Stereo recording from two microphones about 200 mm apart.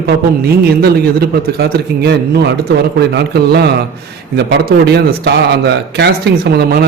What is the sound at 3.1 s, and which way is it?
A man's voice, 55° right (ahead or behind).